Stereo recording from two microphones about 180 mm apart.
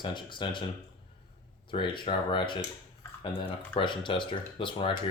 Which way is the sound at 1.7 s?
25° left (ahead or behind).